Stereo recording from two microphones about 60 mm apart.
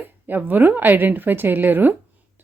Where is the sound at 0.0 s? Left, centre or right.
Right.